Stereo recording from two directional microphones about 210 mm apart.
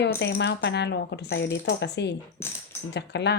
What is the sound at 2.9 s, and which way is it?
Speech, 55° left (ahead or behind).